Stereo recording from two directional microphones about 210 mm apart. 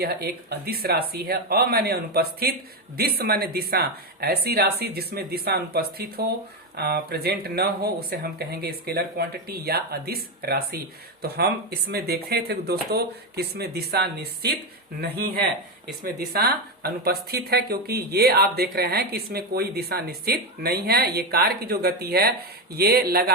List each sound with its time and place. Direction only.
0.0 s speech: 50° right (ahead or behind)